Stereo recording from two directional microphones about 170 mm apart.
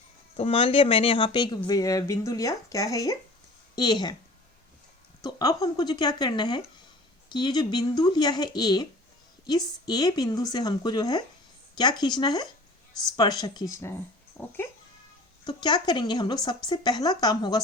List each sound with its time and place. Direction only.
0.3 s speech: 35° left (ahead or behind)
5.2 s a child's voice: 20° left (ahead or behind)
15.4 s speech: 25° left (ahead or behind)